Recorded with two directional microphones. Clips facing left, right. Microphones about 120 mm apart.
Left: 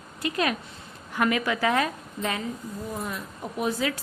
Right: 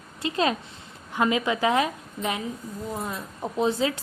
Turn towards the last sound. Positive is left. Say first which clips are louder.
# right 3 dB
turn(degrees=-25)  # may be behind; listen again after turning